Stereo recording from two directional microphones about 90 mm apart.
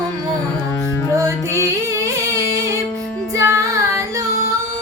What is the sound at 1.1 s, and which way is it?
Music, 35° right (ahead or behind).